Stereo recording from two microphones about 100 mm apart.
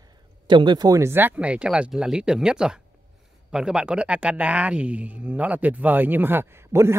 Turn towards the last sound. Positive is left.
turn(degrees=-25)  # may be behind; listen again after turning